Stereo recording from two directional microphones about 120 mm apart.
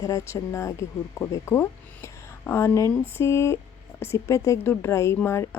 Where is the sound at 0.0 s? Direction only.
30° left (ahead or behind).